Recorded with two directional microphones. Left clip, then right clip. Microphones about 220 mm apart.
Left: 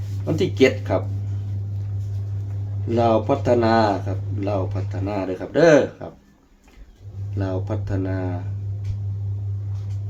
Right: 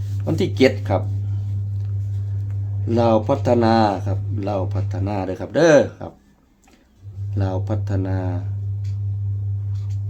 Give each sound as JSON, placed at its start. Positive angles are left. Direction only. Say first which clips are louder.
{"t": 0.3, "sound": "speech", "louder": "right 1 dB", "side_deg": -50}
{"t": 2.9, "sound": "speech", "louder": "right 1 dB", "side_deg": -50}
{"t": 7.3, "sound": "speech", "louder": "right 1 dB", "side_deg": -50}